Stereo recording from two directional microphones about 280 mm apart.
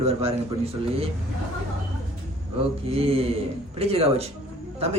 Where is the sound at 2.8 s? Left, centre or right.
Right.